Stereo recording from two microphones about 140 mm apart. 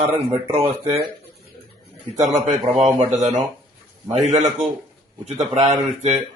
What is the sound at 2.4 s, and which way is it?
Speech, 55° right (ahead or behind).